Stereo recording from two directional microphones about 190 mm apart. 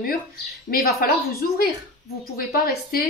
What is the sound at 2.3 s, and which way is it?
Speech, 50° left (ahead or behind).